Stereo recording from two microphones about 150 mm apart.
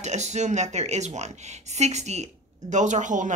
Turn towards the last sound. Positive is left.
turn(degrees=-55)  # may be behind; listen again after turning